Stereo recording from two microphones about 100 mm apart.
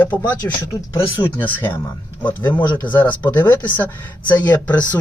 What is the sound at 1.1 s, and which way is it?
A man's voice, 20° left (ahead or behind).